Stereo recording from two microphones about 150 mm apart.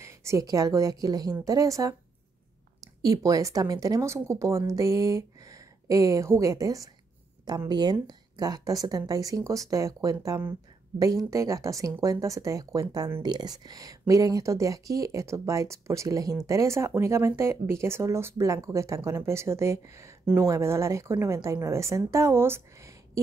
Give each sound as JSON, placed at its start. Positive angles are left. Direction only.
{"t": 0.0, "sound": "speech", "side_deg": -20}